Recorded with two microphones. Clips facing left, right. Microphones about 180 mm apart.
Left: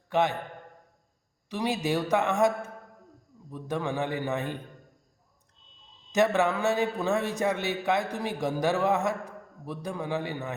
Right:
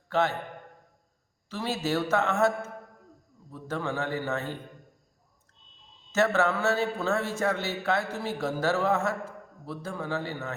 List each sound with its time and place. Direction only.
0.1 s a man's voice: 15° left (ahead or behind)
1.5 s a man's voice: 15° left (ahead or behind)
6.1 s a man's voice: 15° left (ahead or behind)